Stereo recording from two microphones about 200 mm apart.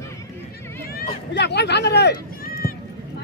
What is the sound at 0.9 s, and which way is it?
Speech, 60° left (ahead or behind).